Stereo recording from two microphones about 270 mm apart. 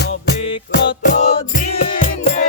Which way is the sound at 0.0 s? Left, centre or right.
Left.